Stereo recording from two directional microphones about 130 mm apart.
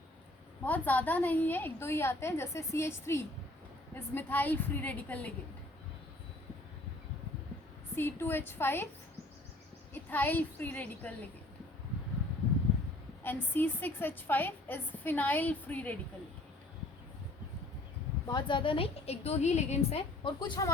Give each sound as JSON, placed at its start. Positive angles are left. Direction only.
{"t": 0.6, "sound": "a woman's voice", "side_deg": 10}
{"t": 7.9, "sound": "a woman's voice", "side_deg": 15}
{"t": 9.9, "sound": "a woman's voice", "side_deg": 15}
{"t": 13.2, "sound": "a woman's voice", "side_deg": 15}
{"t": 18.3, "sound": "a woman's voice", "side_deg": 35}